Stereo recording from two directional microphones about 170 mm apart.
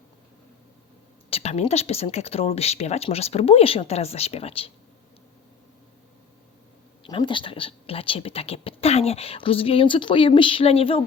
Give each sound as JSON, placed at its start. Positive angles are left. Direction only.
{"t": 1.3, "sound": "speech", "side_deg": 40}
{"t": 7.0, "sound": "speech", "side_deg": 30}